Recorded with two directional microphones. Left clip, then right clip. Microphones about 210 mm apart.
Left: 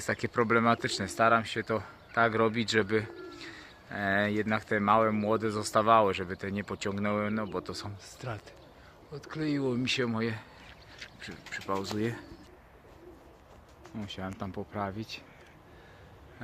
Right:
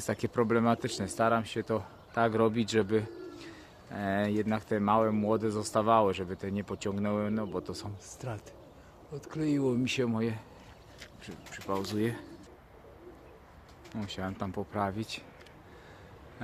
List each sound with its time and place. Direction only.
0.0 s speech: 15° right (ahead or behind)
14.0 s speech: 5° right (ahead or behind)